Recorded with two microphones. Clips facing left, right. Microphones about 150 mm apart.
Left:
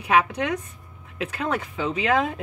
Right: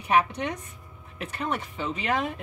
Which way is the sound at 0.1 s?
90° left.